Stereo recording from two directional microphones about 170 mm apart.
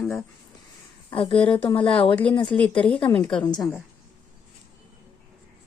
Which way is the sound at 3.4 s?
20° left (ahead or behind).